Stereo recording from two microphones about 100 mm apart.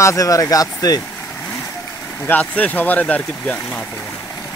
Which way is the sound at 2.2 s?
15° left (ahead or behind).